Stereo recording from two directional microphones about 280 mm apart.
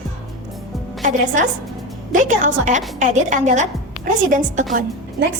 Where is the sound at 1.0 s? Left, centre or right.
Right.